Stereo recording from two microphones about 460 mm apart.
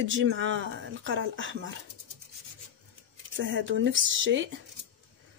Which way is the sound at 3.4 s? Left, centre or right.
Right.